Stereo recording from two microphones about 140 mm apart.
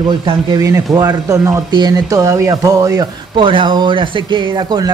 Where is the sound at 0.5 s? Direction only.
25° right (ahead or behind).